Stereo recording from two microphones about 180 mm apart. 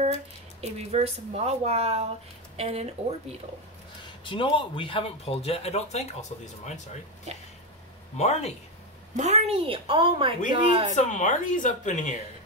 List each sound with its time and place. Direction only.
0.6 s speech: 35° right (ahead or behind)
4.2 s speech: 30° left (ahead or behind)
8.2 s speech: 35° left (ahead or behind)
9.1 s speech: 40° right (ahead or behind)
11.0 s speech: 45° left (ahead or behind)